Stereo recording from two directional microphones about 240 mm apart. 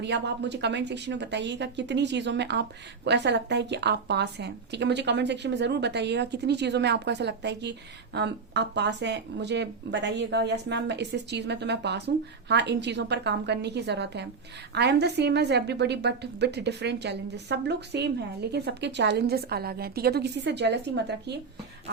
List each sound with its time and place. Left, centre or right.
0.0 s speech: right